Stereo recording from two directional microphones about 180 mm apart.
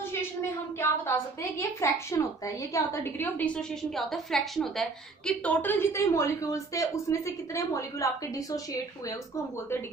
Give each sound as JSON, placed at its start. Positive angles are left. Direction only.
{"t": 0.8, "sound": "a woman's voice", "side_deg": 15}